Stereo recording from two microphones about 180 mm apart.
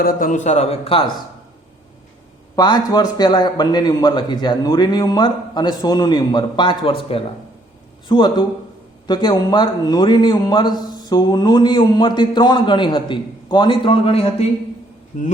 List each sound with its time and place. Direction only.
0.0 s a man's voice: 50° left (ahead or behind); by 1.1 s 30° left (ahead or behind)
2.6 s a man's voice: 20° left (ahead or behind); by 15.3 s 40° left (ahead or behind)